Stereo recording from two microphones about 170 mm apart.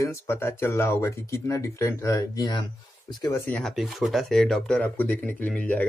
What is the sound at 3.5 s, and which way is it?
Speech, 5° left (ahead or behind).